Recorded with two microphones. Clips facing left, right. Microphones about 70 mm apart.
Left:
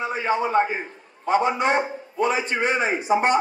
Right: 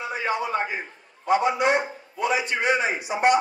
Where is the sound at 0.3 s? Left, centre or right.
Left.